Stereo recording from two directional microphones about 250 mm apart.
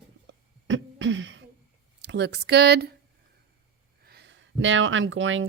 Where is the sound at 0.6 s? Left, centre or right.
Right.